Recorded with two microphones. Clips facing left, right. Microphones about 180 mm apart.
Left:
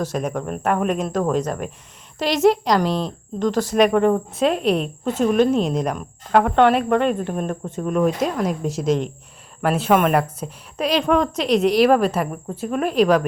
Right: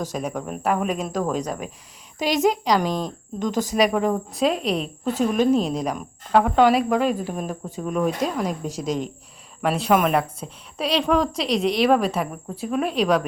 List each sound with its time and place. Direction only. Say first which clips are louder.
0.0 s speech: left 3 dB; 10° right (ahead or behind)
2.8 s speech: left 3 dB; 10° right (ahead or behind)